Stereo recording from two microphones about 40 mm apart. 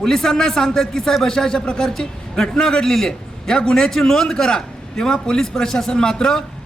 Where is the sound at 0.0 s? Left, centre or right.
Centre.